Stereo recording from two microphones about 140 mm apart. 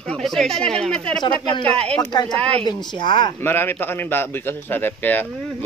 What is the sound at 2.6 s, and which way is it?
Speech, 30° left (ahead or behind).